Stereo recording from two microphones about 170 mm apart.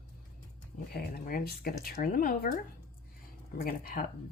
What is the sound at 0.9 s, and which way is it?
Speech, 60° left (ahead or behind).